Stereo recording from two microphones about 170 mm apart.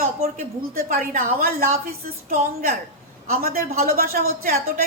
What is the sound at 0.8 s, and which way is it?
A woman's voice, 55° right (ahead or behind).